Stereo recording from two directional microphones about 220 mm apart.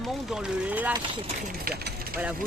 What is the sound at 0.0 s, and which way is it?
Speech, centre (ahead or behind).